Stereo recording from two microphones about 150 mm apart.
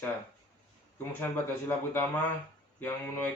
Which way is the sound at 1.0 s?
15° left (ahead or behind).